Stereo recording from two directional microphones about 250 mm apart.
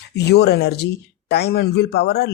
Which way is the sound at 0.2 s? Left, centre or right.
Left.